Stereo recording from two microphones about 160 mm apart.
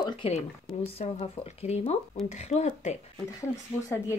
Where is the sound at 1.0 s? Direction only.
45° left (ahead or behind).